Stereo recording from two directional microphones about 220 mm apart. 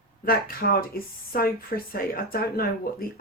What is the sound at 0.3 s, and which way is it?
Speech, 40° left (ahead or behind).